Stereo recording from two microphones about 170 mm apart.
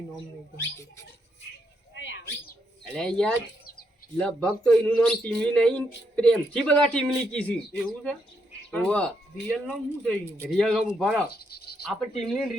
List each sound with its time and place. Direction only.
0.5 s speech: 15° left (ahead or behind)
2.0 s a sound: 90° left
2.9 s speech: 5° left (ahead or behind)
8.7 s speech: 5° left (ahead or behind)
11.3 s insect: 65° left (ahead or behind)
11.9 s speech: centre (ahead or behind)